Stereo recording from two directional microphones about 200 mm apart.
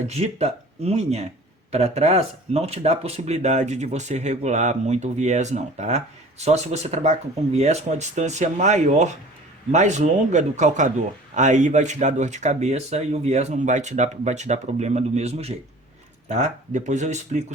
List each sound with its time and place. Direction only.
0.1 s speech: 30° right (ahead or behind)